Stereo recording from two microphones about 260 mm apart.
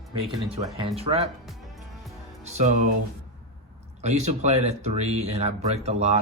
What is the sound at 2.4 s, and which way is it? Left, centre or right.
Speech, right.